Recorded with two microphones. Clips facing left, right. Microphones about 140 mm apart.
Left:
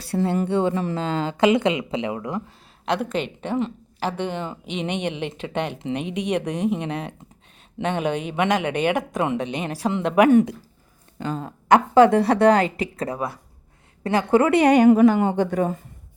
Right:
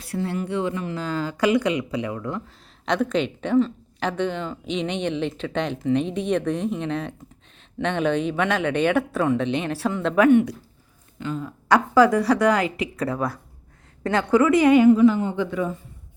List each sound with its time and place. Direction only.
0.0 s speech: 30° left (ahead or behind)
0.9 s a woman's voice: 25° left (ahead or behind)
11.2 s speech: 35° left (ahead or behind)
11.7 s a woman's voice: 25° left (ahead or behind)
13.1 s a woman's voice: 15° left (ahead or behind)
14.5 s a woman's voice: 70° left (ahead or behind)
15.4 s a woman's voice: 45° left (ahead or behind)